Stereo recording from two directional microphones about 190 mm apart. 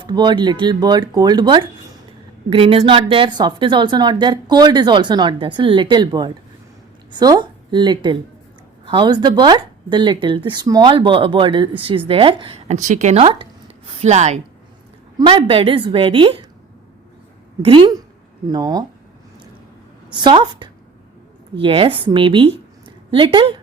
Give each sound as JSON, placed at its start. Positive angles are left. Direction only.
{"t": 0.0, "sound": "speech", "side_deg": -25}
{"t": 17.6, "sound": "speech", "side_deg": -25}
{"t": 20.1, "sound": "speech", "side_deg": -25}